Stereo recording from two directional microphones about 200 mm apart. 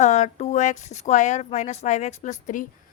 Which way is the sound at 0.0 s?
35° left (ahead or behind).